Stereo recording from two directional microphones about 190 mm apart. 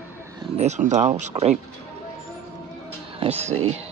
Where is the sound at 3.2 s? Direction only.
35° right (ahead or behind).